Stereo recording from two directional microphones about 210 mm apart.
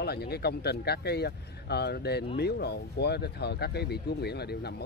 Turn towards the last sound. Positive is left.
turn(degrees=50)  # may be behind; listen again after turning